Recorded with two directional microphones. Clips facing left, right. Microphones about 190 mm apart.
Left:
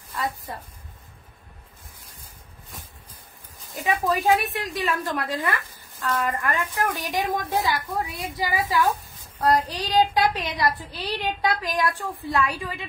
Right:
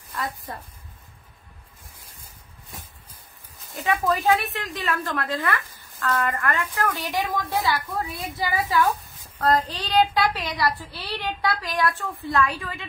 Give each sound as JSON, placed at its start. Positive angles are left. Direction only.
{"t": 3.8, "sound": "a woman's voice", "side_deg": 15}